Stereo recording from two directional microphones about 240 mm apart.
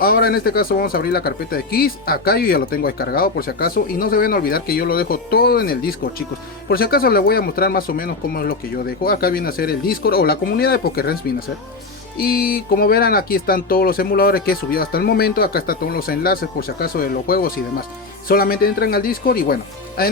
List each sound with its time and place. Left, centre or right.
0.0 s speech: left